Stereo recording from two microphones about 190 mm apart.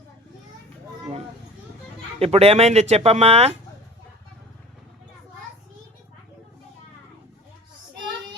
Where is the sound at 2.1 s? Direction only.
30° right (ahead or behind).